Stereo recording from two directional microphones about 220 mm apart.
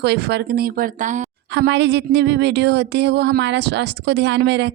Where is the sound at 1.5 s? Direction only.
55° right (ahead or behind).